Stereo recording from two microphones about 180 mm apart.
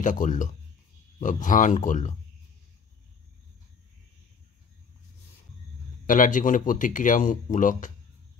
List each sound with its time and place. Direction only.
0.0 s speech: 45° left (ahead or behind)
6.0 s speech: 45° left (ahead or behind)